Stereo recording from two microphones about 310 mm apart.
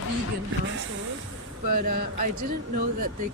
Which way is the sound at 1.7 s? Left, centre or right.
Right.